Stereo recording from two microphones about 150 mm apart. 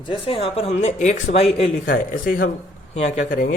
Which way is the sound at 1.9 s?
80° left.